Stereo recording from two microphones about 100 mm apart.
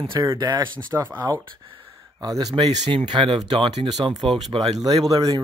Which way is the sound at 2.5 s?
55° right (ahead or behind).